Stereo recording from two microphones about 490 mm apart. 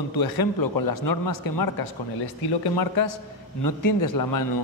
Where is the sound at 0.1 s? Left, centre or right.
Left.